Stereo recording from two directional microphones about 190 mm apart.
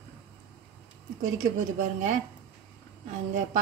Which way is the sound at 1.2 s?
40° right (ahead or behind).